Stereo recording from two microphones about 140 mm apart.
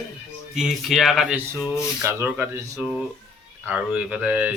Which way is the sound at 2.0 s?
15° right (ahead or behind).